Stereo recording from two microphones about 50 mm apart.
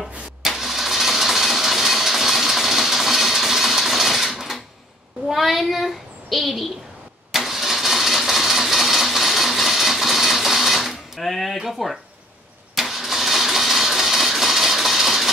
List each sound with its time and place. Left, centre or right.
0.4 s engine starting: centre
5.3 s child singing: centre
7.3 s engine starting: centre